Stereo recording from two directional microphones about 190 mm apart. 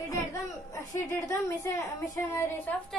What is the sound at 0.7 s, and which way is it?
A woman's voice, 15° left (ahead or behind).